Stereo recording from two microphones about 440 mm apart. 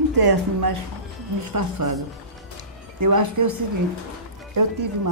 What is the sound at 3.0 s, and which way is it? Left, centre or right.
Speech, right.